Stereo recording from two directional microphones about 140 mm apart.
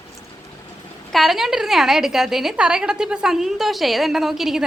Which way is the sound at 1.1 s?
Centre (ahead or behind).